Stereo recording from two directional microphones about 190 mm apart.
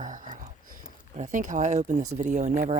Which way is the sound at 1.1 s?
45° right (ahead or behind).